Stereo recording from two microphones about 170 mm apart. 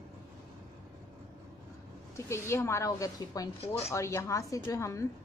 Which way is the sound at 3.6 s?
35° left (ahead or behind).